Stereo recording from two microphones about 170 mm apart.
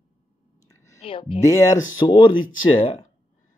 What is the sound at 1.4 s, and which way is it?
Speech, 20° left (ahead or behind).